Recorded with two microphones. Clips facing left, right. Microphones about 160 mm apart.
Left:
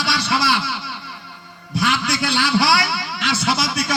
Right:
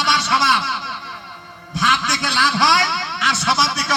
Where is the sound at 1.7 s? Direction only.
30° left (ahead or behind).